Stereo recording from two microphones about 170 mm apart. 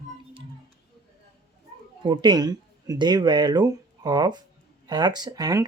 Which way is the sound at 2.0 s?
25° right (ahead or behind).